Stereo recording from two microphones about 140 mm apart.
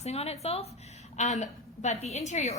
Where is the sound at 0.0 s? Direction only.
50° left (ahead or behind).